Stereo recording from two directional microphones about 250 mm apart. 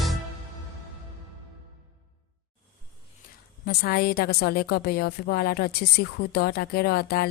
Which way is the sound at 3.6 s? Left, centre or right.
Left.